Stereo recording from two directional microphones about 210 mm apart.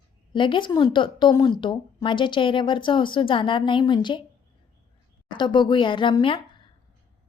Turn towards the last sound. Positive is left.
turn(degrees=25)  # may be behind; listen again after turning